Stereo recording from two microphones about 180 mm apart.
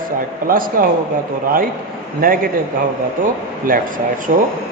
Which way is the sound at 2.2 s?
50° right (ahead or behind).